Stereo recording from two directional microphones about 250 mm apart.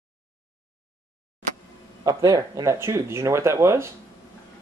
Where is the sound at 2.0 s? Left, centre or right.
Centre.